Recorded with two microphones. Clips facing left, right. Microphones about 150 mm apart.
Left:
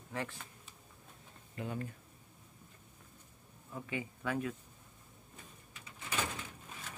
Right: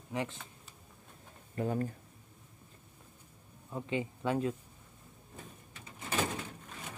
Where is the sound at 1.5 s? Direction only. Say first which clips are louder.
Right 7 dB; 40° right (ahead or behind).